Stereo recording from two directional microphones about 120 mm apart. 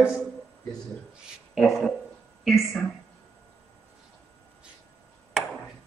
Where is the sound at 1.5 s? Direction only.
Centre (ahead or behind).